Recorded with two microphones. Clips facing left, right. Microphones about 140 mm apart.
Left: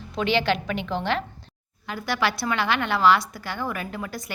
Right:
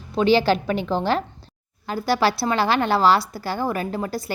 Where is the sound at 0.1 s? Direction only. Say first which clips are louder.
Right 6 dB; 35° right (ahead or behind).